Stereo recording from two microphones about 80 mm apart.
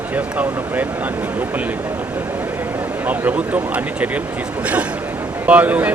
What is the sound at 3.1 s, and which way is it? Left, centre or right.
Speech, centre.